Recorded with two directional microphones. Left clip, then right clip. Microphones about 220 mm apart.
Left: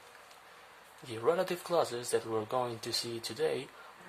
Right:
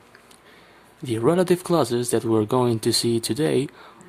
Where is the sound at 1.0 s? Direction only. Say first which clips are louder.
Right 11 dB; 25° right (ahead or behind).